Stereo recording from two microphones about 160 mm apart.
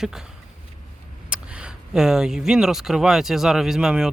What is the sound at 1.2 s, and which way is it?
Speech, 5° right (ahead or behind).